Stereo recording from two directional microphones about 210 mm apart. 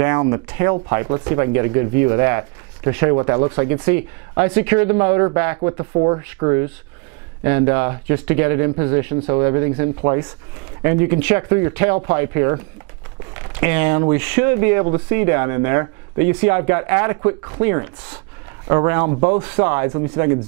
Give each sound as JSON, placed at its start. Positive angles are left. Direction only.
{"t": 0.0, "sound": "speech", "side_deg": -20}